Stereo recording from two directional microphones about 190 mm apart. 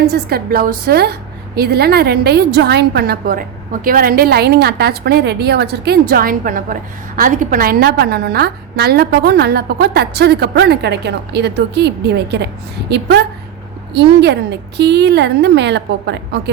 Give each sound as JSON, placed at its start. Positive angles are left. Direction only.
{"t": 0.1, "sound": "a woman's voice", "side_deg": -55}